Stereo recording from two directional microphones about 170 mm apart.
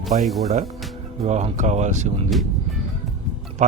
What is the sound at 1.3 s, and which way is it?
Speech, 45° right (ahead or behind).